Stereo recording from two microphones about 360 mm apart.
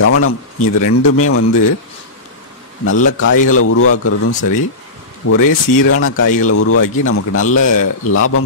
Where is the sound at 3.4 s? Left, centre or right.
Left.